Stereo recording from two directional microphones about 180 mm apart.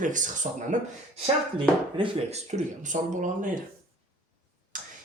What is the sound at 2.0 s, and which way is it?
Speech, 35° right (ahead or behind).